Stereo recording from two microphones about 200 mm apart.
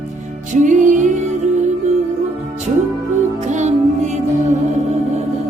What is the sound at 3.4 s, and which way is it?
Music, 35° right (ahead or behind).